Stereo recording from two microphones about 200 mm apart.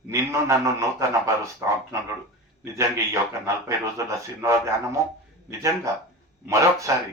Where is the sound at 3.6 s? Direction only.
15° right (ahead or behind).